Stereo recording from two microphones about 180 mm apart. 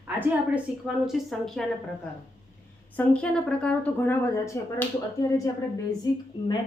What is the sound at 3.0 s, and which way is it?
Speech, 5° left (ahead or behind).